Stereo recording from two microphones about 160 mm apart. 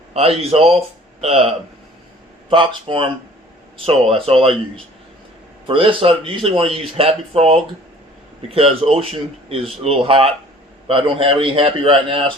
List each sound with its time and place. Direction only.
0.1 s speech: 40° right (ahead or behind)
5.6 s speech: 35° right (ahead or behind)